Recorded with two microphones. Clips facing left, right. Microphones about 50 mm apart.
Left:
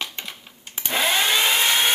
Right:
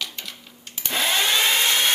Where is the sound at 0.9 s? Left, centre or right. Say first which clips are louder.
Left 1 dB; centre.